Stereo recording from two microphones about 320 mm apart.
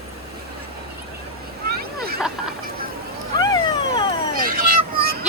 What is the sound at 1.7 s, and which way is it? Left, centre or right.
Vehicle, right.